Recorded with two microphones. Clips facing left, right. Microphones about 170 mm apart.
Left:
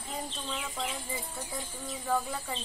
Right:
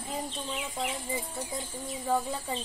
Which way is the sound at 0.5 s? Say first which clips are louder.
Right 2 dB; 15° right (ahead or behind).